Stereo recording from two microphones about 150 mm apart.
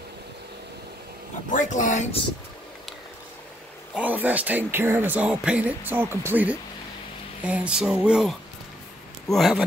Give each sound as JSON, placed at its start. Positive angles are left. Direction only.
{"t": 1.5, "sound": "speech", "side_deg": 55}
{"t": 3.9, "sound": "speech", "side_deg": -10}